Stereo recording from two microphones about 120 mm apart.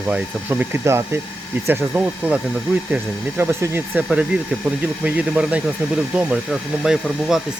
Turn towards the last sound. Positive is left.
turn(degrees=-5)  # may be behind; listen again after turning